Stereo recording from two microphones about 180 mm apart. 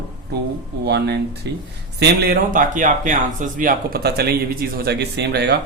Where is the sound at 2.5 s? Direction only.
45° right (ahead or behind); by 5.6 s 65° right (ahead or behind).